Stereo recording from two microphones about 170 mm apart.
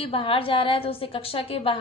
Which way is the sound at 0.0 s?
35° left (ahead or behind).